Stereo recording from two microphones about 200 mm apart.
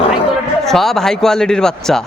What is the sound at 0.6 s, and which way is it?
Speech, centre (ahead or behind).